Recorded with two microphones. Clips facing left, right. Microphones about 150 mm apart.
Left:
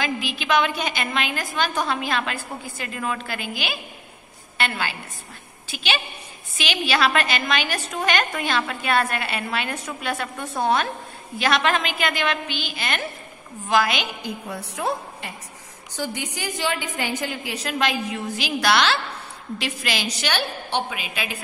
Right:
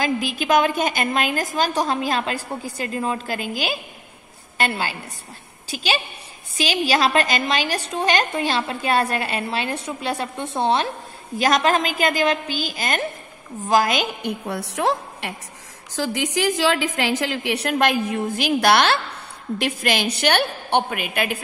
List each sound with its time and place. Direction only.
0.0 s a woman's voice: 45° right (ahead or behind); by 10.9 s 30° right (ahead or behind)
11.3 s a woman's voice: 40° right (ahead or behind)
14.2 s a woman's voice: 75° right (ahead or behind)
16.0 s a woman's voice: 90° right; by 21.4 s 55° right (ahead or behind)